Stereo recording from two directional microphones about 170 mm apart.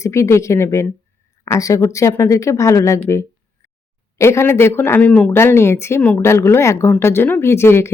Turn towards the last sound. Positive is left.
turn(degrees=15)  # may be behind; listen again after turning